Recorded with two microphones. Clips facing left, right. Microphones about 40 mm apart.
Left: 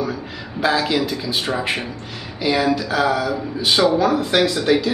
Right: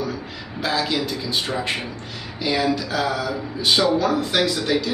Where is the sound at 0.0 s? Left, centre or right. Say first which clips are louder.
Left 3 dB; centre.